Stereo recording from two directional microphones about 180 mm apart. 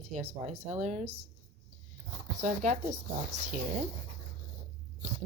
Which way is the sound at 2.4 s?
40° right (ahead or behind).